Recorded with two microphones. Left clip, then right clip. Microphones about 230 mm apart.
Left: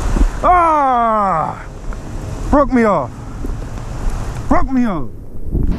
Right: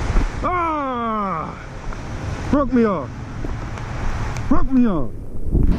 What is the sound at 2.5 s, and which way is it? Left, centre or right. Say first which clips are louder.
Speech: left 6 dB; left.